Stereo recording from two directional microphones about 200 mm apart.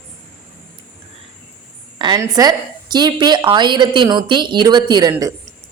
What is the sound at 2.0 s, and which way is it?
A woman's voice, 20° right (ahead or behind).